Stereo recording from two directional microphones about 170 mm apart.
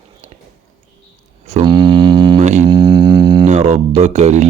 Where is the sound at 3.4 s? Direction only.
40° right (ahead or behind).